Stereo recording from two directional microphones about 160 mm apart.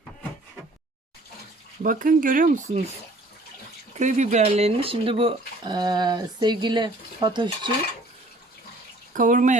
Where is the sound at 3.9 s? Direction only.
50° right (ahead or behind); by 7.7 s 30° right (ahead or behind).